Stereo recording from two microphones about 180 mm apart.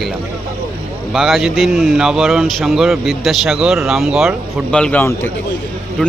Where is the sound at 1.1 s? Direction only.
Centre (ahead or behind).